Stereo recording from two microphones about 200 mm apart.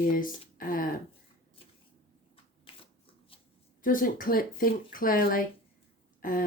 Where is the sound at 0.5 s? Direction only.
45° left (ahead or behind).